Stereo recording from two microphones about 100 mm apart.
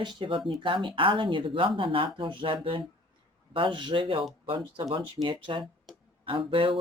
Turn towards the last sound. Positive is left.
turn(degrees=-60)  # may be behind; listen again after turning